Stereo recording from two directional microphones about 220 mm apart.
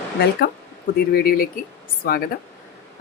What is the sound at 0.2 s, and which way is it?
Speech, 45° left (ahead or behind).